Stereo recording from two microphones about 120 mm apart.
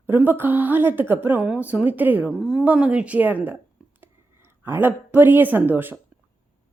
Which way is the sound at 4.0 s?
20° right (ahead or behind).